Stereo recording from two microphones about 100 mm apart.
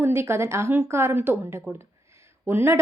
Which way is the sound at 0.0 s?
25° right (ahead or behind).